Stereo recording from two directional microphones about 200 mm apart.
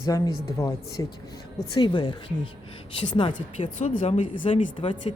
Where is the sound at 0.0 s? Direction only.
20° left (ahead or behind).